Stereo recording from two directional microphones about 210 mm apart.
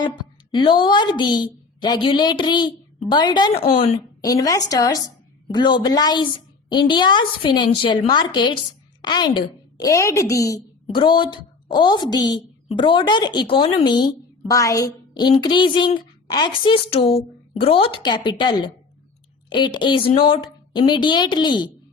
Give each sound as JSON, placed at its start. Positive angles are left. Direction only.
{"t": 0.5, "sound": "a woman's voice", "side_deg": 20}
{"t": 4.2, "sound": "a woman's voice", "side_deg": 15}